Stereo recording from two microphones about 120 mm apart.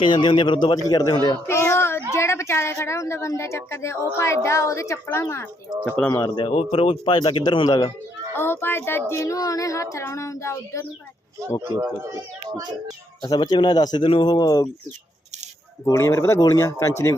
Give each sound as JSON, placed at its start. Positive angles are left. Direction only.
{"t": 0.0, "sound": "speech", "side_deg": 40}
{"t": 1.5, "sound": "a sound", "side_deg": 20}
{"t": 2.1, "sound": "a woman's voice", "side_deg": 25}
{"t": 6.5, "sound": "speech", "side_deg": 55}
{"t": 8.4, "sound": "a woman's voice", "side_deg": 20}
{"t": 11.6, "sound": "speech", "side_deg": -25}
{"t": 13.2, "sound": "speech", "side_deg": 35}
{"t": 15.8, "sound": "a woman's voice", "side_deg": 25}